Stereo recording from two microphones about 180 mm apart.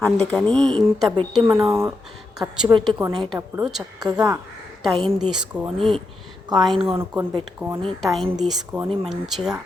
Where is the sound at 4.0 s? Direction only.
20° right (ahead or behind).